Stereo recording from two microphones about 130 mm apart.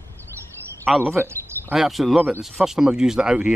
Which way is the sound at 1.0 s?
20° right (ahead or behind).